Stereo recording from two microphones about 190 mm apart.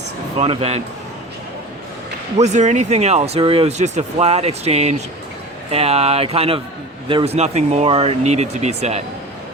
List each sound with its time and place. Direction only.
0.3 s speech: 30° right (ahead or behind)
2.4 s speech: 40° right (ahead or behind)